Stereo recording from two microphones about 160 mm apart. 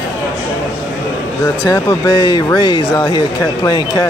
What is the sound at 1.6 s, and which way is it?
Speech, 20° left (ahead or behind).